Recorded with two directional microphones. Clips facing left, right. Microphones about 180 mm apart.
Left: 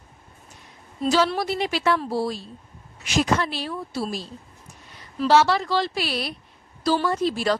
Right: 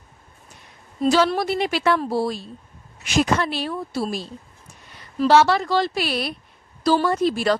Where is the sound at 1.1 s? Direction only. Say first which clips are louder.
Right 1 dB; 55° right (ahead or behind).